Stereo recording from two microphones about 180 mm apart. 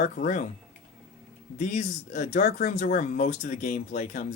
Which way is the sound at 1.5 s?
45° left (ahead or behind).